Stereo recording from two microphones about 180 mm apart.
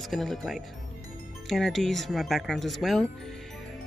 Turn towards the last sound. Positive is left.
turn(degrees=0)  # may be behind; listen again after turning